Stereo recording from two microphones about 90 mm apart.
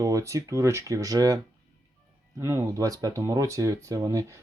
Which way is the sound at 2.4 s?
35° right (ahead or behind).